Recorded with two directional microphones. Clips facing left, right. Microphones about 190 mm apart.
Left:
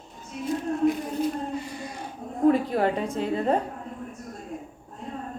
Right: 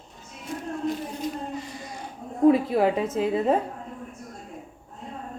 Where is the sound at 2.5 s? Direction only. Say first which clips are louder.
Right 2 dB; 5° right (ahead or behind).